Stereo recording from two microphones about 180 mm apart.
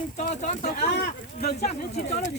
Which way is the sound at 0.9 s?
60° left (ahead or behind).